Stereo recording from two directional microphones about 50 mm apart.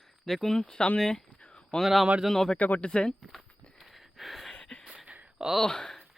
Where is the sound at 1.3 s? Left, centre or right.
Left.